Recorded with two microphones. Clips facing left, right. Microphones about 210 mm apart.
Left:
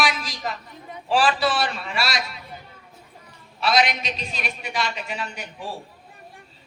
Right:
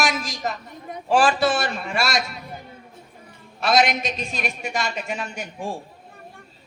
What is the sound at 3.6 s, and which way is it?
A woman's voice, 50° right (ahead or behind).